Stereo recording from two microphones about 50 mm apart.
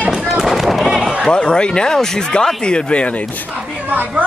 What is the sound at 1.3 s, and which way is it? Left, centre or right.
Speech, centre.